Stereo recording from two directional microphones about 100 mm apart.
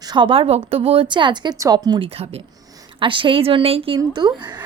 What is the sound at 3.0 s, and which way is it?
Speech, 60° right (ahead or behind).